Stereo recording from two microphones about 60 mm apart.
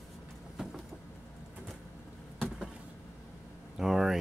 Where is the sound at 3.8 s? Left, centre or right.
Centre.